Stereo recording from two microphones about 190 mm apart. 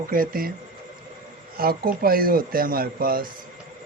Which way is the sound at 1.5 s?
50° right (ahead or behind).